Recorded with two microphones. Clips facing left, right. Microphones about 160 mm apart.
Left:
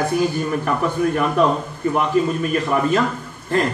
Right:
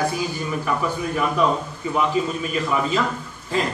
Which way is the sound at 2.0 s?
55° left (ahead or behind).